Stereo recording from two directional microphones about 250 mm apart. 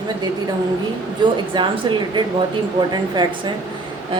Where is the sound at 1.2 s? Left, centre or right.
Centre.